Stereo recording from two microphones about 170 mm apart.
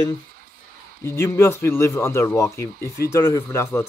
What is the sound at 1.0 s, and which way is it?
A man's voice, 15° left (ahead or behind).